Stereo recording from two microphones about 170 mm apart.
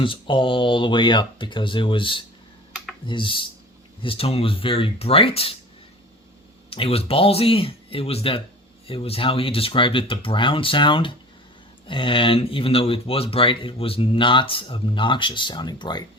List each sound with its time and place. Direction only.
0.0 s speech: 30° left (ahead or behind)
6.7 s speech: 35° left (ahead or behind)